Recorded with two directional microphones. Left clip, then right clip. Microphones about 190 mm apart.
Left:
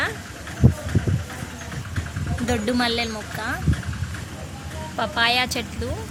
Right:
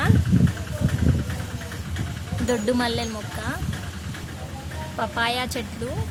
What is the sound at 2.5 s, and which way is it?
A woman's voice, 5° right (ahead or behind).